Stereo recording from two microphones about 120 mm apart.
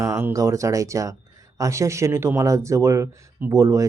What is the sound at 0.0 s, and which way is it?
Speech, 20° right (ahead or behind).